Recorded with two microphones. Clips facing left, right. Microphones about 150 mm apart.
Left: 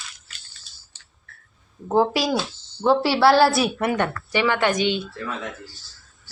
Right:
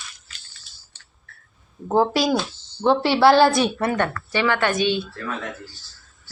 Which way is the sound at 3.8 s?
15° left (ahead or behind).